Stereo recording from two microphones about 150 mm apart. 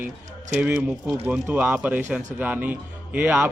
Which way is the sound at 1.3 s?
10° right (ahead or behind).